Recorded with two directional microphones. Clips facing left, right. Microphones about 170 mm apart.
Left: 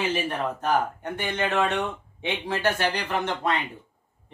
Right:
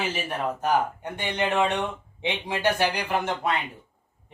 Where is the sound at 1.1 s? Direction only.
15° right (ahead or behind).